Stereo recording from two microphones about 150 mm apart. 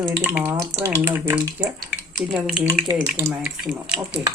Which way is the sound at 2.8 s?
20° right (ahead or behind).